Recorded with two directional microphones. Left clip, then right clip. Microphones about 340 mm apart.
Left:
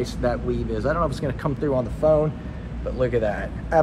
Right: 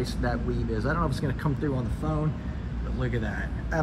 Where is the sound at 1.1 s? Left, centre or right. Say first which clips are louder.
Left 4 dB; centre.